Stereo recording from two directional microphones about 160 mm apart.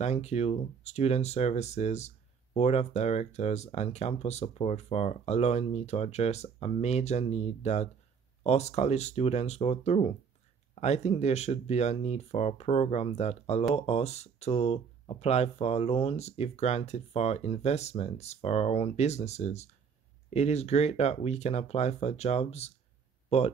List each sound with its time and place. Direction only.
0.0 s speech: 45° left (ahead or behind)